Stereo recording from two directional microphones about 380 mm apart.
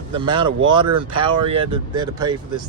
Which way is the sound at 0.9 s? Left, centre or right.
Right.